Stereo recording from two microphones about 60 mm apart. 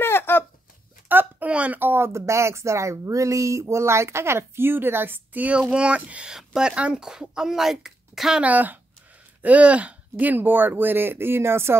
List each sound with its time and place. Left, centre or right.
0.0 s a sound: left
1.0 s a sound: right
1.5 s speech: right
1.8 s speech: right
2.1 s speech: right
5.6 s speech: centre
6.3 s speech: centre
8.4 s speech: right